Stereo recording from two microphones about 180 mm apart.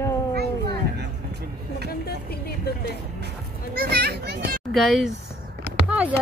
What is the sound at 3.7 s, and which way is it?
Speech, 60° right (ahead or behind).